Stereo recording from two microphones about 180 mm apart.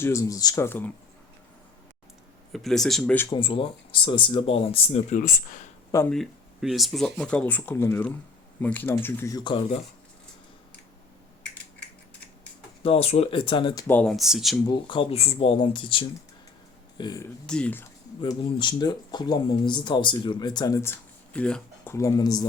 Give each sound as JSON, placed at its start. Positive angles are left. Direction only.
{"t": 0.0, "sound": "speech", "side_deg": 15}
{"t": 2.5, "sound": "speech", "side_deg": 0}
{"t": 3.2, "sound": "speech", "side_deg": 25}
{"t": 5.1, "sound": "speech", "side_deg": 45}
{"t": 6.1, "sound": "speech", "side_deg": 0}
{"t": 12.8, "sound": "speech", "side_deg": 35}
{"t": 13.8, "sound": "speech", "side_deg": 5}
{"t": 14.7, "sound": "speech", "side_deg": 25}
{"t": 17.4, "sound": "speech", "side_deg": 5}
{"t": 18.2, "sound": "speech", "side_deg": 30}
{"t": 21.3, "sound": "speech", "side_deg": 5}
{"t": 21.9, "sound": "speech", "side_deg": 20}